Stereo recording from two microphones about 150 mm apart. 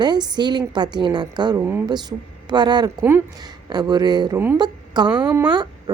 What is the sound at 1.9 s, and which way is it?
A woman's voice, 30° right (ahead or behind).